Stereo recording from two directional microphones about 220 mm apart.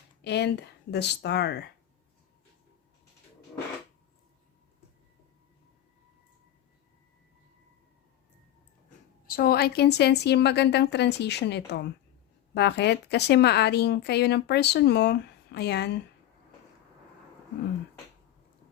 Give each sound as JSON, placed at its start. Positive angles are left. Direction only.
{"t": 0.2, "sound": "a woman's voice", "side_deg": 50}
{"t": 9.2, "sound": "a woman's voice", "side_deg": 40}